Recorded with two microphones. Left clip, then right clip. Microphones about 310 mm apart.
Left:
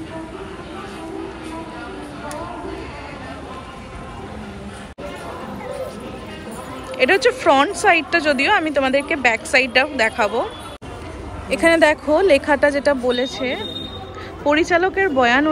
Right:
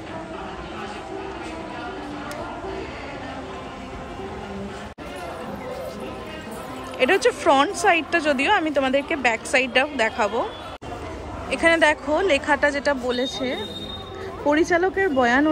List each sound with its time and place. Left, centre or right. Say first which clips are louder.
7.0 s speech: left 3 dB; centre
11.5 s speech: left 4 dB; centre
14.7 s speech: left 3 dB; centre